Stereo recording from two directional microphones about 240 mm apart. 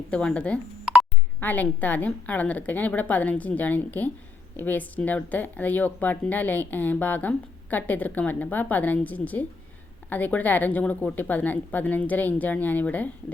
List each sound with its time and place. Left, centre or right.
0.1 s speech: centre